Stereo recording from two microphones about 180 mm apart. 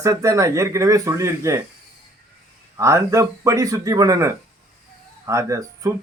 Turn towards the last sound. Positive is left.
turn(degrees=-15)  # may be behind; listen again after turning